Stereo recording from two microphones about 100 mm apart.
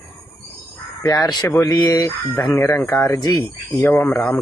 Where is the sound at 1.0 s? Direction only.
40° left (ahead or behind).